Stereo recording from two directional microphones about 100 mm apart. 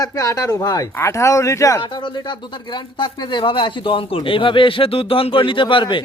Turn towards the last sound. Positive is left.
turn(degrees=55)  # may be behind; listen again after turning